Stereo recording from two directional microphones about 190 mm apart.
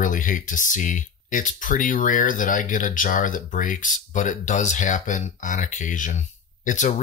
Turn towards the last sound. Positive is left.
turn(degrees=40)  # may be behind; listen again after turning